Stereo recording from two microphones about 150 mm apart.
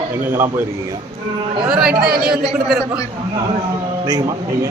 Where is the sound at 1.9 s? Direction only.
90° right.